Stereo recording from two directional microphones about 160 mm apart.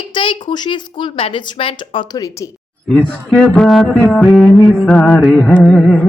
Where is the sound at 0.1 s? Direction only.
30° left (ahead or behind).